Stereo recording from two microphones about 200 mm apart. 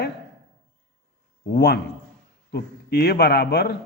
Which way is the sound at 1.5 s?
55° left (ahead or behind).